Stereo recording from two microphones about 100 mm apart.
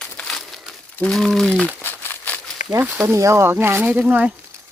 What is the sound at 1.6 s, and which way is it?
Crumpling, 20° left (ahead or behind).